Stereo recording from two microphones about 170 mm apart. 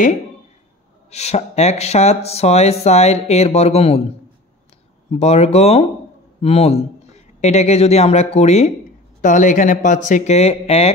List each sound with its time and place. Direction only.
1.1 s speech: 40° left (ahead or behind)
5.1 s speech: 40° left (ahead or behind)